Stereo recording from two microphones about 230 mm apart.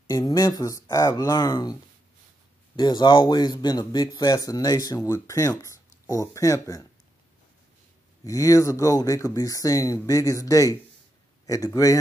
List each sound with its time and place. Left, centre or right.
0.0 s speech: centre
8.2 s speech: centre